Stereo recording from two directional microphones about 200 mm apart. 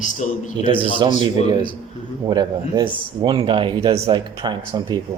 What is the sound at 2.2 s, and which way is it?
Speech, 20° right (ahead or behind).